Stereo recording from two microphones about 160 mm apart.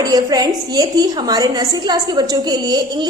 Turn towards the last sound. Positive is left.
turn(degrees=-25)  # may be behind; listen again after turning